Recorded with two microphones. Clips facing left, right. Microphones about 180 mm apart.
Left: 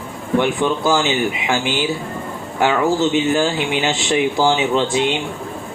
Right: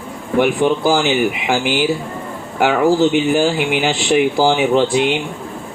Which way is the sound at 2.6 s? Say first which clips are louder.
Right 3 dB; 15° right (ahead or behind).